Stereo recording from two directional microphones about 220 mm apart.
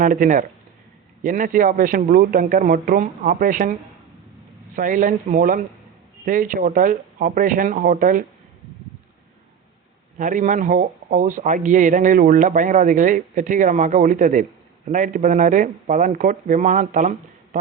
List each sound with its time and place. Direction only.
0.0 s a man's voice: 35° right (ahead or behind)
10.2 s a man's voice: 35° right (ahead or behind)